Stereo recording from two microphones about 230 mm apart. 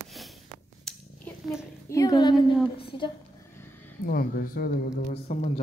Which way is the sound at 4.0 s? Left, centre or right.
Left.